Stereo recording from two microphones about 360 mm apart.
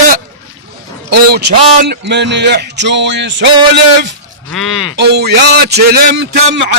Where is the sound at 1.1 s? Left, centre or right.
Right.